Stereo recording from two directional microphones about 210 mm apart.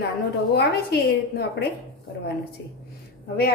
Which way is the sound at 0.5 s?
50° left (ahead or behind).